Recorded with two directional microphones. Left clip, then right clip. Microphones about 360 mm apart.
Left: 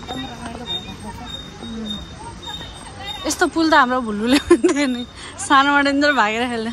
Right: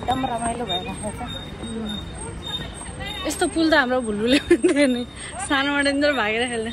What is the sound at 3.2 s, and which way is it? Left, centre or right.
A woman's voice, centre.